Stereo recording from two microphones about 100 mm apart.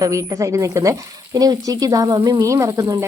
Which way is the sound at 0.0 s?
35° right (ahead or behind).